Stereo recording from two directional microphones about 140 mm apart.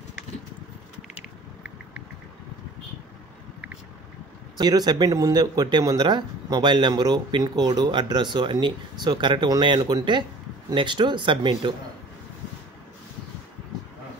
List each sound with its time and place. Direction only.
4.6 s speech: 30° right (ahead or behind)